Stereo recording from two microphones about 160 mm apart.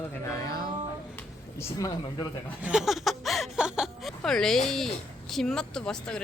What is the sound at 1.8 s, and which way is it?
Speech, 25° left (ahead or behind).